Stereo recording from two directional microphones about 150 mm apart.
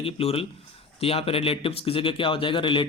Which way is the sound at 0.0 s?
40° left (ahead or behind).